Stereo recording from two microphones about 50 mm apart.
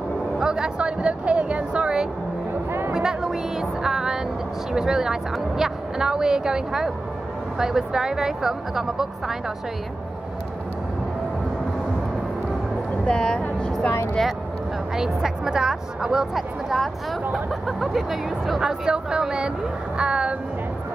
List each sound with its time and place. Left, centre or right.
0.4 s speech: centre
13.0 s speech: centre
15.0 s speech: centre